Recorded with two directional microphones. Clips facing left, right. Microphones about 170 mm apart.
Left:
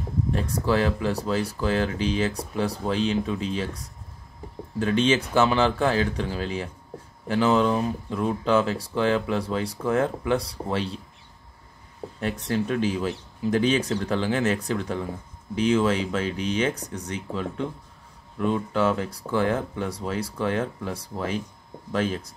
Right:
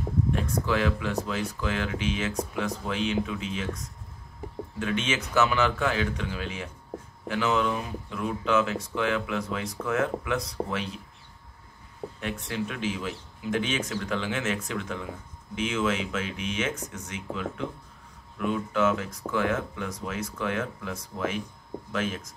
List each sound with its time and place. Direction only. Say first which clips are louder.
0.3 s speech: left 5 dB; 35° left (ahead or behind)
12.2 s speech: left 6 dB; 35° left (ahead or behind)